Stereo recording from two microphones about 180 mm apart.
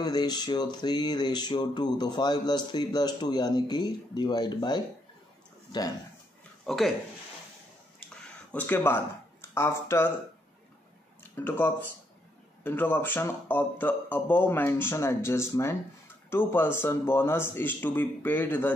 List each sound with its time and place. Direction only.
0.0 s speech: 20° left (ahead or behind)
6.6 s speech: centre (ahead or behind)
8.5 s speech: 10° left (ahead or behind)
11.3 s speech: 10° left (ahead or behind)